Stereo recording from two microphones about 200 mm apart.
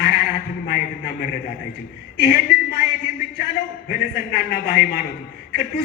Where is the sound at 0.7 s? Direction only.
45° left (ahead or behind).